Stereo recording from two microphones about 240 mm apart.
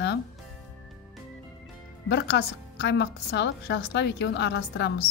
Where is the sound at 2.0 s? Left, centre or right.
Left.